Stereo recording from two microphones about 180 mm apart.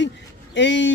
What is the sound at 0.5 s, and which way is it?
Speech, 90° left.